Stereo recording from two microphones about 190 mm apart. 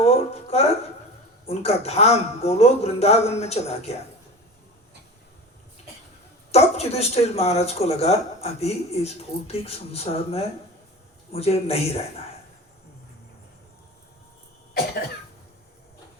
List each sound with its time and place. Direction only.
0.0 s a sound: 30° left (ahead or behind)
1.5 s speech: 35° left (ahead or behind)
6.5 s speech: 35° left (ahead or behind)